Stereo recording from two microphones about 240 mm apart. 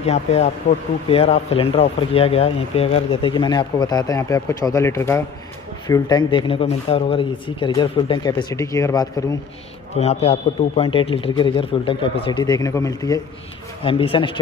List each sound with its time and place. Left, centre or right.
0.0 s speech: left
9.9 s speech: left